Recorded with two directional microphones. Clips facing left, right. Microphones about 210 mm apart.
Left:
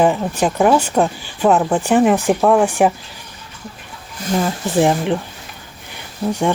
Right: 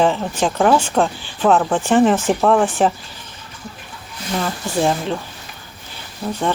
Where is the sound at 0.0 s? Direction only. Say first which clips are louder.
Left 2 dB; 5° left (ahead or behind).